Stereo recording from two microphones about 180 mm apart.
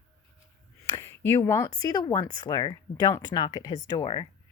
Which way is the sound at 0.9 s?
15° left (ahead or behind).